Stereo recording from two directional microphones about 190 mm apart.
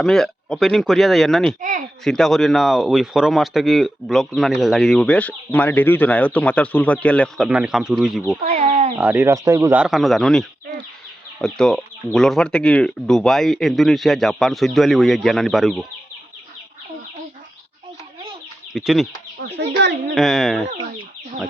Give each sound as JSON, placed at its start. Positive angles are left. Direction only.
{"t": 0.0, "sound": "speech", "side_deg": 0}
{"t": 8.4, "sound": "speech", "side_deg": -35}
{"t": 9.0, "sound": "speech", "side_deg": -10}
{"t": 18.7, "sound": "speech", "side_deg": 0}
{"t": 19.4, "sound": "speech", "side_deg": -65}
{"t": 20.1, "sound": "speech", "side_deg": 0}